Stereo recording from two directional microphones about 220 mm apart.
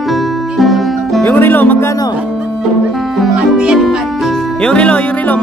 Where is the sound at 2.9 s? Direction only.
Centre (ahead or behind).